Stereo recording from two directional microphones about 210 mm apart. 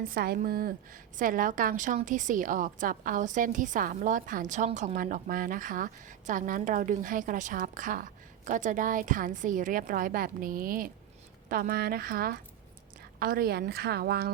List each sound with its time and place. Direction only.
0.0 s a woman's voice: 45° right (ahead or behind)